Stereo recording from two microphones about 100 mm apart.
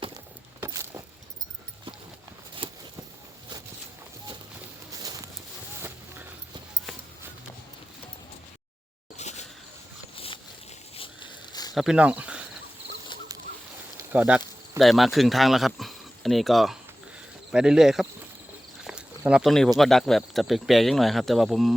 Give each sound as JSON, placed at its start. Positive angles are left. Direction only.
{"t": 0.6, "sound": "keys jangling", "side_deg": -30}
{"t": 2.6, "sound": "a sound", "side_deg": -65}
{"t": 4.9, "sound": "clip-clop", "side_deg": -35}
{"t": 10.2, "sound": "a sound", "side_deg": 65}
{"t": 11.7, "sound": "speech", "side_deg": -5}
{"t": 14.1, "sound": "speech", "side_deg": -15}
{"t": 14.8, "sound": "speech", "side_deg": 0}
{"t": 18.9, "sound": "a sound", "side_deg": -10}
{"t": 19.5, "sound": "speech", "side_deg": 5}